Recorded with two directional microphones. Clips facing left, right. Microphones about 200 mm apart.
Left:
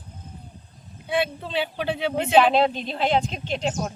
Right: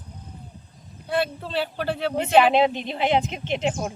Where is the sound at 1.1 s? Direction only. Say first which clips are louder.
Even; centre (ahead or behind).